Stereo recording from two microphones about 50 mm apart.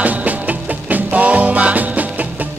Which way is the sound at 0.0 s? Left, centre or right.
Right.